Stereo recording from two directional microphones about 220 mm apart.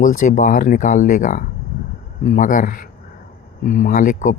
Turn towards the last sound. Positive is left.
turn(degrees=35)  # may be behind; listen again after turning